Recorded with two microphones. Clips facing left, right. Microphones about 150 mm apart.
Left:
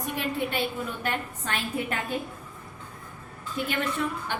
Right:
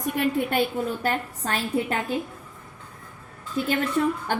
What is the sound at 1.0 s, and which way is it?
Speech, 35° right (ahead or behind).